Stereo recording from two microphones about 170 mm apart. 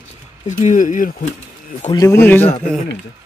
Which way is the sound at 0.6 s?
50° left (ahead or behind).